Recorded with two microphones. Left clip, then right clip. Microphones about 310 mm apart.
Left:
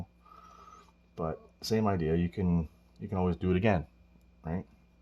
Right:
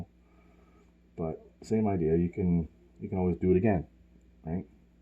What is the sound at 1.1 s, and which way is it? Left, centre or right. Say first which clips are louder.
Speech: even; left.